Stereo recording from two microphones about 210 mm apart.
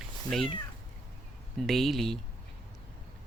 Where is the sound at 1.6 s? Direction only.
Centre (ahead or behind).